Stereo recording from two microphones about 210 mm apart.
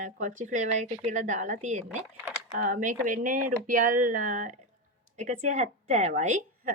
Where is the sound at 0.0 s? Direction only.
35° right (ahead or behind).